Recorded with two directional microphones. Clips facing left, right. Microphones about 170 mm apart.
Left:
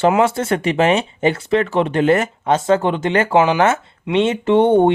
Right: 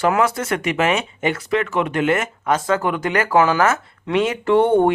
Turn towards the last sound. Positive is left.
turn(degrees=20)  # may be behind; listen again after turning